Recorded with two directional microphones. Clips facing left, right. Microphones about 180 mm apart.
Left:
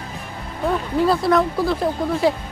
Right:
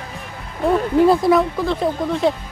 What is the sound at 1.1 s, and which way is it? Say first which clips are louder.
Speech: right 2 dB; 15° right (ahead or behind).